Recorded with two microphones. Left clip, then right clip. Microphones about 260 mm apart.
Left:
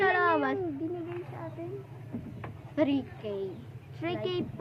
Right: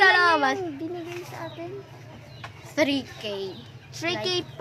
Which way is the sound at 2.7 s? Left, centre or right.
Centre.